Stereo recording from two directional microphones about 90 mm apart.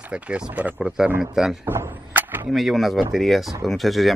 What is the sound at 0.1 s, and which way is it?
Speech, 10° right (ahead or behind).